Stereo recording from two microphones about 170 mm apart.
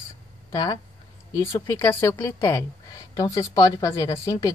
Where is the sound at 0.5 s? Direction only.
25° left (ahead or behind).